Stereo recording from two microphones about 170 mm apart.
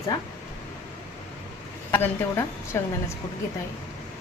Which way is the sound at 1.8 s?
15° left (ahead or behind).